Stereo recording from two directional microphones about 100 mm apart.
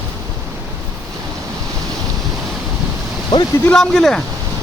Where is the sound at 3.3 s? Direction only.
45° left (ahead or behind).